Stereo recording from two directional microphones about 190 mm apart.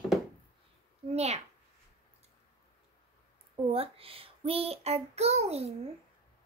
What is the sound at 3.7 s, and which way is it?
A child's voice, 30° right (ahead or behind).